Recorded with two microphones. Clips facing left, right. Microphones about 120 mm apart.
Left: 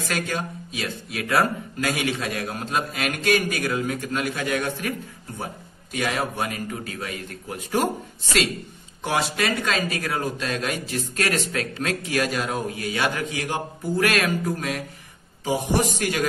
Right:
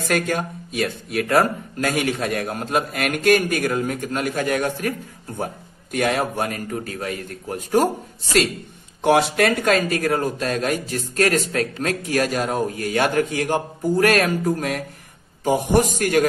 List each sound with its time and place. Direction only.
0.0 s speech: 55° right (ahead or behind)
9.0 s speech: 55° right (ahead or behind)